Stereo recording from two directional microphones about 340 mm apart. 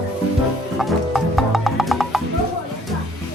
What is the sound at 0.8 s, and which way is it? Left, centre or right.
Music, centre.